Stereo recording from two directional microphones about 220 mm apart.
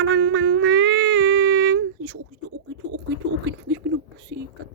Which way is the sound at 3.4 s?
55° right (ahead or behind).